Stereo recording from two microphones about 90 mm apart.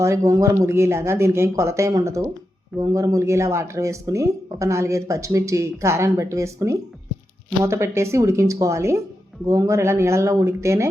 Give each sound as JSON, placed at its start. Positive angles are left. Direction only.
{"t": 0.0, "sound": "speech", "side_deg": -35}